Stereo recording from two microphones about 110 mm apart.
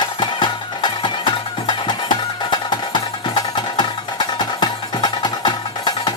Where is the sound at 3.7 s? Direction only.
40° left (ahead or behind).